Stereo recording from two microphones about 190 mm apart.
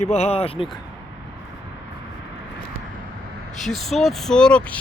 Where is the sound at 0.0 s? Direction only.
35° left (ahead or behind).